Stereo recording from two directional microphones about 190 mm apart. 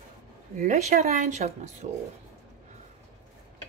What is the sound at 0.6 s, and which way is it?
A woman's voice, 35° right (ahead or behind).